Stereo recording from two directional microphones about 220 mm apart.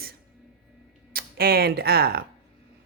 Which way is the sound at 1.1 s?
40° right (ahead or behind).